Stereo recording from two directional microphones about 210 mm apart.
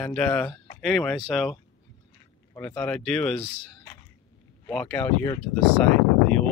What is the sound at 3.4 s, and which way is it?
Speech, 15° left (ahead or behind).